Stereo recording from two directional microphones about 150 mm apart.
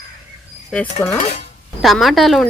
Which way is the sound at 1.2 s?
45° left (ahead or behind).